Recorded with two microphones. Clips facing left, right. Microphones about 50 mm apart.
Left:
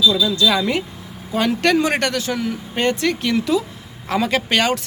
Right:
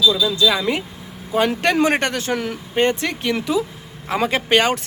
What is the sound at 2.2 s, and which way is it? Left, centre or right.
Speech, right.